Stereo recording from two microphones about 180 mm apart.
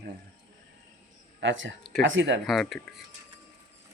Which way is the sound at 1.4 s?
90° right.